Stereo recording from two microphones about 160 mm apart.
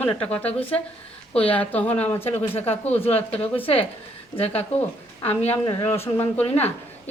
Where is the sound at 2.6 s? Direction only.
40° left (ahead or behind).